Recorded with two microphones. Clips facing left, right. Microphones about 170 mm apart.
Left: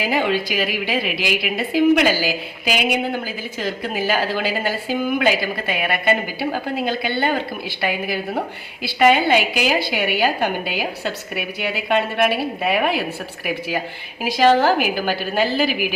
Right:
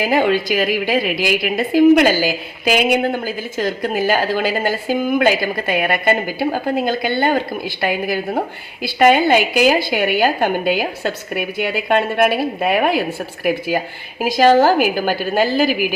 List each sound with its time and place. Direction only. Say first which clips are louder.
0.0 s a woman's voice: right 4 dB; 45° right (ahead or behind)